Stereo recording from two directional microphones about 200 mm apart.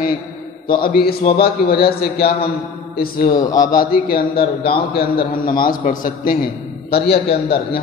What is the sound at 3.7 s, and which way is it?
A man's voice, 45° left (ahead or behind).